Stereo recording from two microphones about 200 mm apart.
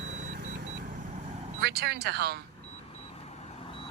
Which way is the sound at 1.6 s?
55° right (ahead or behind).